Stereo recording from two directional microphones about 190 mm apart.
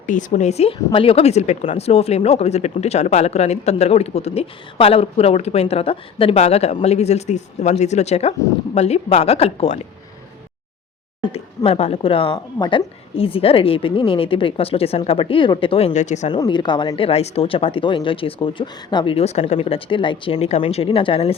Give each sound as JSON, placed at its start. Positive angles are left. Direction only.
{"t": 0.0, "sound": "speech", "side_deg": 40}
{"t": 11.2, "sound": "speech", "side_deg": 30}
{"t": 16.3, "sound": "speech", "side_deg": 25}